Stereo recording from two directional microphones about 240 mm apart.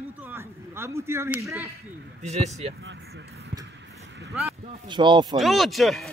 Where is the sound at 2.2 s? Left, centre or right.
Right.